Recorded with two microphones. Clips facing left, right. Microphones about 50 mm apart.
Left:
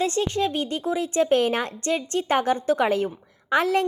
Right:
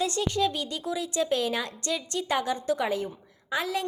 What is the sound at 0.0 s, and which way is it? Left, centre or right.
A woman's voice, left.